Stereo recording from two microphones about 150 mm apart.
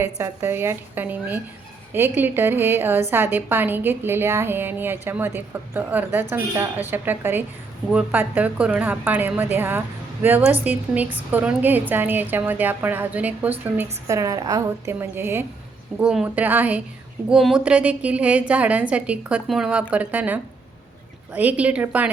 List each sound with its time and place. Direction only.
0.0 s a woman's voice: 15° right (ahead or behind)
14.1 s a woman's voice: 20° right (ahead or behind)